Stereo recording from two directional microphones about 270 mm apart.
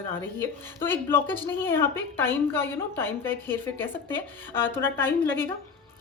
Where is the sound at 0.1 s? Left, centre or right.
Centre.